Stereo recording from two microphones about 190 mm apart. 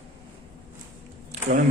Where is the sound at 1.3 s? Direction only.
35° right (ahead or behind).